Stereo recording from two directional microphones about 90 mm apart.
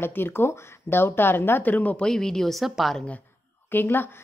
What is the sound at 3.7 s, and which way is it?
Speech, 20° left (ahead or behind).